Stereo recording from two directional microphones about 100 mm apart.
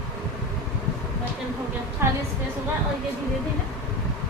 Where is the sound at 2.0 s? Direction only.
25° right (ahead or behind).